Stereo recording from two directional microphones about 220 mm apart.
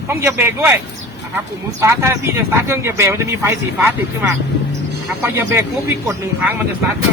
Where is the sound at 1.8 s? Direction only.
10° right (ahead or behind).